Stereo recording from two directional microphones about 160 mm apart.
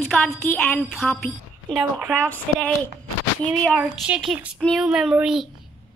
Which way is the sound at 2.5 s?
5° left (ahead or behind).